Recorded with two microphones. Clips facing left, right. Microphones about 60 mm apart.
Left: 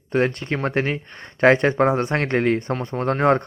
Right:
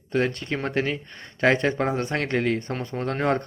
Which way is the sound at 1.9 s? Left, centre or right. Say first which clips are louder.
Left 5 dB; left.